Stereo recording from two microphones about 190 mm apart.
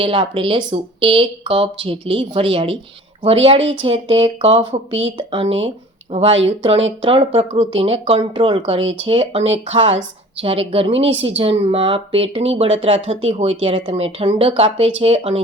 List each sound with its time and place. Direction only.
0.0 s speech: 30° right (ahead or behind)